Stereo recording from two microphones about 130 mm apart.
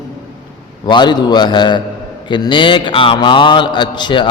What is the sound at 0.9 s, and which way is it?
Mantra, 35° left (ahead or behind).